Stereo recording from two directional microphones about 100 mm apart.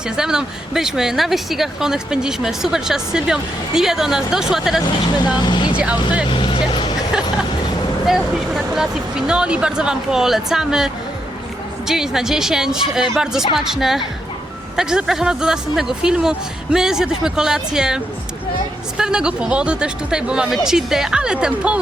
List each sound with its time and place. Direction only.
0.2 s speech: 5° right (ahead or behind)
5.4 s speech: 50° left (ahead or behind)
5.7 s speech: 15° right (ahead or behind)
6.3 s vehicle: 55° left (ahead or behind)
8.0 s speech: 5° right (ahead or behind)